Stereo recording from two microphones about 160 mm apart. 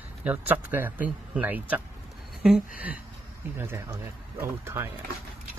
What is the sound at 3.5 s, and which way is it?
Speech, 15° right (ahead or behind).